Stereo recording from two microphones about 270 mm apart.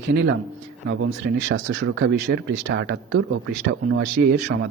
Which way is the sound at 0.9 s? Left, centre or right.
Right.